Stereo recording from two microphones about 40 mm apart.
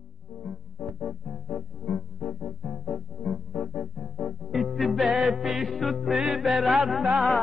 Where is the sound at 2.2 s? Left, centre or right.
Centre.